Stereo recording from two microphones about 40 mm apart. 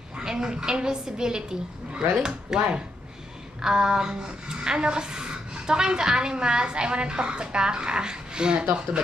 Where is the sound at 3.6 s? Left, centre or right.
Centre.